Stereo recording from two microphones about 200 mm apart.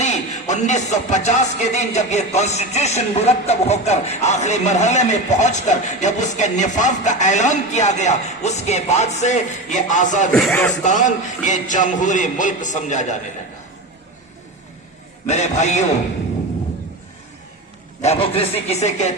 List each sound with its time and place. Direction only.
0.0 s speech: 35° left (ahead or behind)
10.3 s speech: 5° left (ahead or behind)
10.8 s speech: 40° left (ahead or behind)
15.3 s speech: 35° left (ahead or behind)
18.0 s speech: 30° left (ahead or behind)